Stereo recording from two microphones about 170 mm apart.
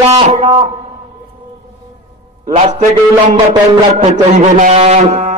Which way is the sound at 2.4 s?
45° right (ahead or behind).